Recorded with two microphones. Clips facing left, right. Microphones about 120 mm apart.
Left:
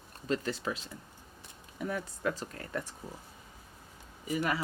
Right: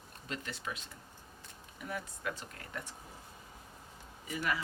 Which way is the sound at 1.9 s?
40° left (ahead or behind).